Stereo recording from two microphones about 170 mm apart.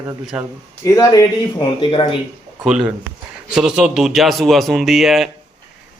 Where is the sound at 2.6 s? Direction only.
5° right (ahead or behind).